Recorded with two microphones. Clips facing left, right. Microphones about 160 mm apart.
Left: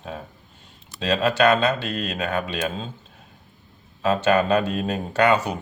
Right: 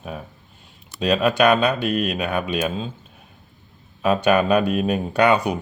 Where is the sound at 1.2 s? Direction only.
15° right (ahead or behind).